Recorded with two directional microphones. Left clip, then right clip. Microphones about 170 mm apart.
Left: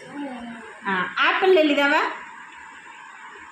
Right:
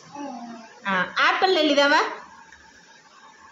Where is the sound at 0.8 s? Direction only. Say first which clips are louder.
Even; 35° right (ahead or behind).